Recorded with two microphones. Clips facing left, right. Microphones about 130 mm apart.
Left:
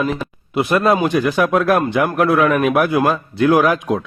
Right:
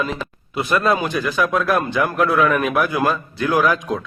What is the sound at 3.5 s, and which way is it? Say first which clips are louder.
Speech: left 3 dB; 25° left (ahead or behind).